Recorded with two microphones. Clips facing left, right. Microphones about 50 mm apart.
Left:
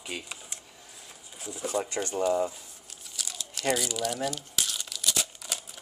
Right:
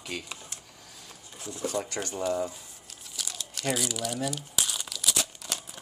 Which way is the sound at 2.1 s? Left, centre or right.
Centre.